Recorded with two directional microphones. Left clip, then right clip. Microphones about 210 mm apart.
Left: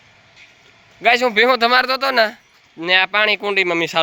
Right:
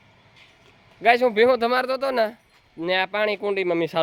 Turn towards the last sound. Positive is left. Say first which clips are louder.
# left 6 dB
turn(degrees=-10)  # may be behind; listen again after turning